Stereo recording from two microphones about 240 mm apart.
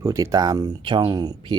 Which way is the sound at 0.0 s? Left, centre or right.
Centre.